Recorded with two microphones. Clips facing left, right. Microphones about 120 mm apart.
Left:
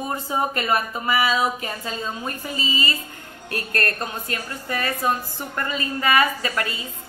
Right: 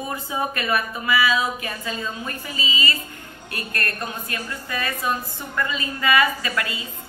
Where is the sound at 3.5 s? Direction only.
40° left (ahead or behind).